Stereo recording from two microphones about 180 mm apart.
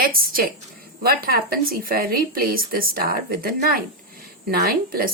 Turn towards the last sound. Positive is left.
turn(degrees=-55)  # may be behind; listen again after turning